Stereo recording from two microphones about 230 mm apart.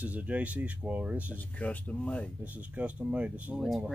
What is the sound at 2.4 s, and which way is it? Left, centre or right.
Speech, centre.